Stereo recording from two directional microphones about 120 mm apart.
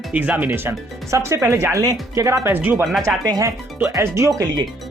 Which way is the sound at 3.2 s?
30° right (ahead or behind).